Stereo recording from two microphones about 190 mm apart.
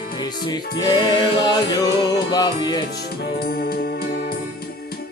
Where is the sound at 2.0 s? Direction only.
20° left (ahead or behind).